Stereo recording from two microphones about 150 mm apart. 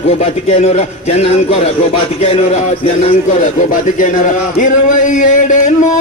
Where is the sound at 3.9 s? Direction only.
60° left (ahead or behind).